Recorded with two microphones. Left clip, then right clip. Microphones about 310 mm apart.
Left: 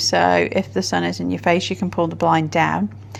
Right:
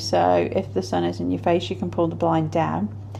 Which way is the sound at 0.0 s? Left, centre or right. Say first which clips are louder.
Left 3 dB; left.